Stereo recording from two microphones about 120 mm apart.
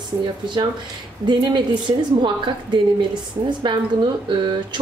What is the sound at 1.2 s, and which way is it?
A woman's voice, 40° right (ahead or behind).